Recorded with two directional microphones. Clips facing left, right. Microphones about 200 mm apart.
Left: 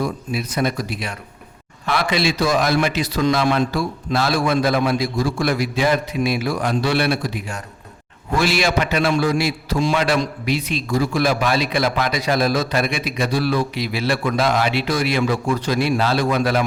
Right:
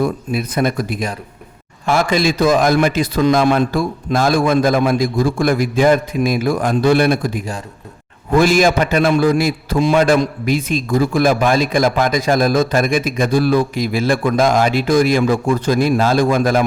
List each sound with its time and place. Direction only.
0.0 s a man's voice: 55° right (ahead or behind)